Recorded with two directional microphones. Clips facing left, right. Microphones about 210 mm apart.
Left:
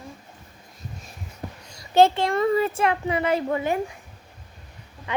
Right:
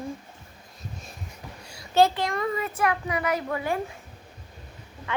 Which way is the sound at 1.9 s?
25° left (ahead or behind).